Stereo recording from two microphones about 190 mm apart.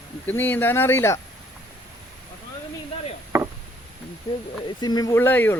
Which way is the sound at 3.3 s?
15° right (ahead or behind).